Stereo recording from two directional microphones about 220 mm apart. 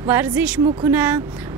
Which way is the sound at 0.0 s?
10° right (ahead or behind).